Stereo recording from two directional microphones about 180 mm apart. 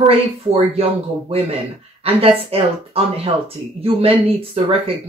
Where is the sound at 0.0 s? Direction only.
35° right (ahead or behind).